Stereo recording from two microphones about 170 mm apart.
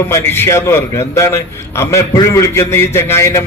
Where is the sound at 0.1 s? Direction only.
15° left (ahead or behind).